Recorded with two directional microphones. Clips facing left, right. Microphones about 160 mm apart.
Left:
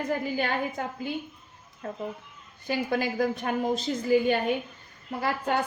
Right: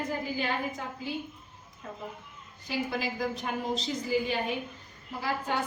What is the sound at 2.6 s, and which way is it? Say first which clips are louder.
A woman's voice: left 5 dB; 55° left (ahead or behind).